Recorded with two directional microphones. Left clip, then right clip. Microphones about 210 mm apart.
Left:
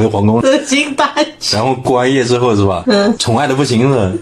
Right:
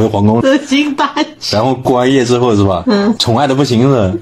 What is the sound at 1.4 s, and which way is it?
Speech, 45° right (ahead or behind).